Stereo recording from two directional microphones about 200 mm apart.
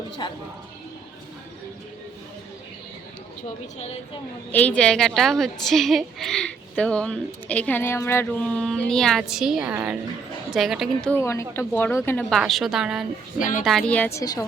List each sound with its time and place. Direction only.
0.2 s speech: 20° left (ahead or behind)
4.5 s a woman's voice: 5° left (ahead or behind)
11.1 s a woman's voice: 15° left (ahead or behind)